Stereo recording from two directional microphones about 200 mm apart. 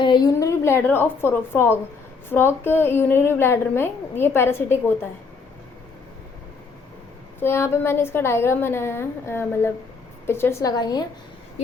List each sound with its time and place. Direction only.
0.0 s a woman's voice: 20° left (ahead or behind)
7.3 s a woman's voice: 10° left (ahead or behind)